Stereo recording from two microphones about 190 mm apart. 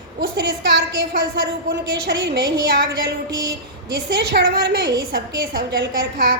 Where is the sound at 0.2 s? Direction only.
65° right (ahead or behind).